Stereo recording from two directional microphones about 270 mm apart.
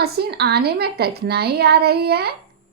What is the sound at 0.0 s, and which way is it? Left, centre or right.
A woman's voice, right.